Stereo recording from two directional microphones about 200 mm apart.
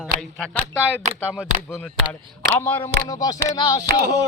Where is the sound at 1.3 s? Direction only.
10° left (ahead or behind).